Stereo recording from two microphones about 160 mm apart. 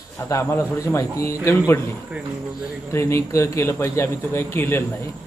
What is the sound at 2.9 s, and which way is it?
A man's voice, 15° left (ahead or behind).